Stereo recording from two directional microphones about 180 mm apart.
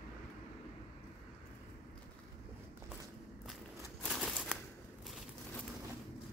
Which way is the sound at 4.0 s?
5° right (ahead or behind).